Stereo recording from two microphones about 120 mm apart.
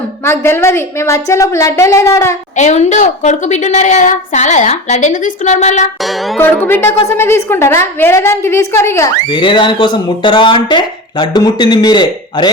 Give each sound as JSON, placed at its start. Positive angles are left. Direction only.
{"t": 0.3, "sound": "a woman's voice", "side_deg": 20}
{"t": 2.6, "sound": "a woman's voice", "side_deg": 75}
{"t": 6.4, "sound": "a woman's voice", "side_deg": 15}
{"t": 9.3, "sound": "speech", "side_deg": 45}